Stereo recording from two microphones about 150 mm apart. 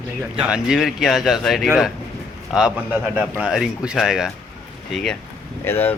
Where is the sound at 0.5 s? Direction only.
5° right (ahead or behind).